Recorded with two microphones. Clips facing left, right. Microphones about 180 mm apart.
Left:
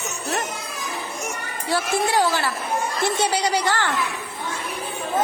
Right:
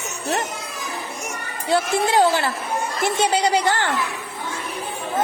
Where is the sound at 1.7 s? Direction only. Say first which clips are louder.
Right 3 dB; 20° right (ahead or behind).